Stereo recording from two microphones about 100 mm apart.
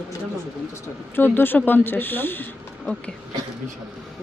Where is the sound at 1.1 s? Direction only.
20° left (ahead or behind).